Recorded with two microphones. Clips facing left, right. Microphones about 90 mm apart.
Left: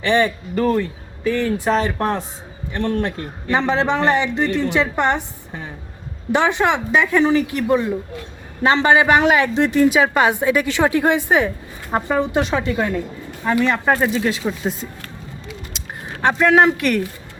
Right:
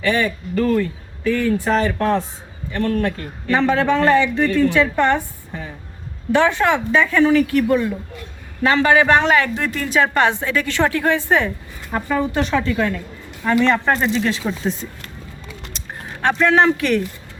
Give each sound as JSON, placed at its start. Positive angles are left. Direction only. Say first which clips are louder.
{"t": 0.0, "sound": "a man's voice", "louder": "left 2 dB", "side_deg": 20}
{"t": 6.3, "sound": "a woman's voice", "louder": "right 1 dB", "side_deg": 15}
{"t": 9.0, "sound": "a woman's voice", "louder": "even", "side_deg": 10}
{"t": 9.9, "sound": "a woman's voice", "louder": "left 1 dB", "side_deg": 5}
{"t": 11.9, "sound": "speech", "louder": "left 3 dB", "side_deg": 35}
{"t": 12.3, "sound": "a woman's voice", "louder": "even", "side_deg": 15}
{"t": 16.4, "sound": "a woman's voice", "louder": "left 1 dB", "side_deg": 10}